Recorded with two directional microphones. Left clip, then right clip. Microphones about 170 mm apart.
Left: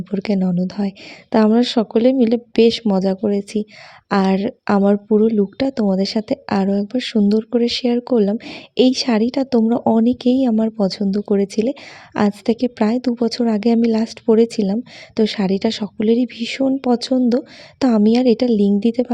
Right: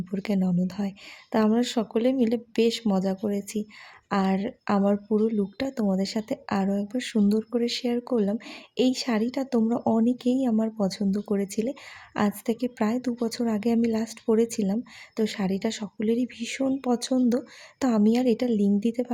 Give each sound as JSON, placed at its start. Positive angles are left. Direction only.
{"t": 0.0, "sound": "speech", "side_deg": 30}